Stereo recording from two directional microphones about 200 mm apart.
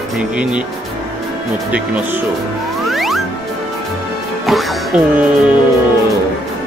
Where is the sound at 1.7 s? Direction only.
5° right (ahead or behind).